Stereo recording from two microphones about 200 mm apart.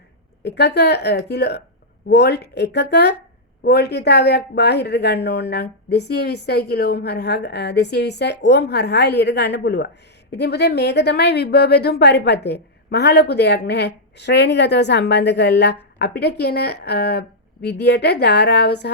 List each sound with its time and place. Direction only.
0.4 s speech: 55° left (ahead or behind)